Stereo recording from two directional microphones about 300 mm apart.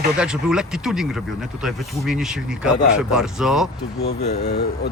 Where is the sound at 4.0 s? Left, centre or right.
Left.